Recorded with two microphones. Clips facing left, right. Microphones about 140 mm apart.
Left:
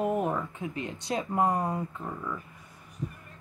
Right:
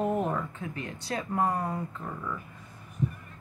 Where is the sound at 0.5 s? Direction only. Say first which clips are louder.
Left 2 dB; 20° left (ahead or behind).